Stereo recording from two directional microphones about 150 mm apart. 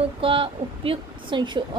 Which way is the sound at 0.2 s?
35° right (ahead or behind).